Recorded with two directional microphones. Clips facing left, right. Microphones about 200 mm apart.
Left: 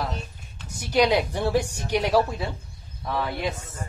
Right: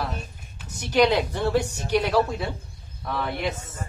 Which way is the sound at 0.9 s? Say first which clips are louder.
Right 1 dB; 10° left (ahead or behind).